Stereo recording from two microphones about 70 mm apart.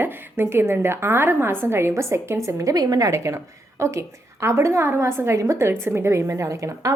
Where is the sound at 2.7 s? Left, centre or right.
Right.